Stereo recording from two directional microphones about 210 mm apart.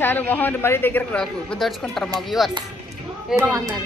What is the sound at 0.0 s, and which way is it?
A woman's voice, 10° left (ahead or behind).